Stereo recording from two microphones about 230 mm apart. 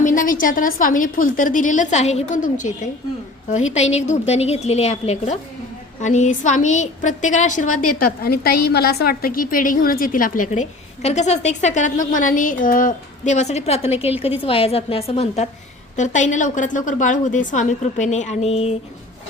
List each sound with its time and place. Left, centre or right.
0.0 s a woman's voice: left
8.4 s a woman's voice: left